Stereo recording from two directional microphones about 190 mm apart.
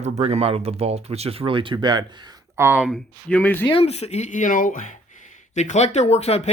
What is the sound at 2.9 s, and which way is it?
Speech, 5° left (ahead or behind).